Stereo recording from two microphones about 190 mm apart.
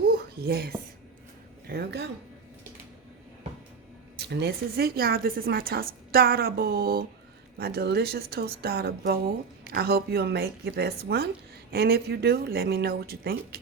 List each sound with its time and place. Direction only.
0.1 s a sound: 55° right (ahead or behind)
1.6 s speech: 55° right (ahead or behind)
4.2 s speech: 60° right (ahead or behind)